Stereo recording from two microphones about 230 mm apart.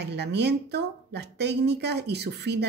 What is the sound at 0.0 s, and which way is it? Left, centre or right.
A woman's voice, right.